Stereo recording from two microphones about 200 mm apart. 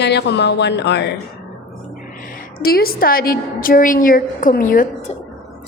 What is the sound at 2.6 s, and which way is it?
A woman's voice, 50° left (ahead or behind).